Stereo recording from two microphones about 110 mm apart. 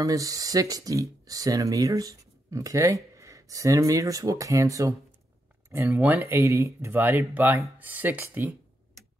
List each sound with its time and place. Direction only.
0.0 s speech: 30° right (ahead or behind); by 8.5 s 15° right (ahead or behind)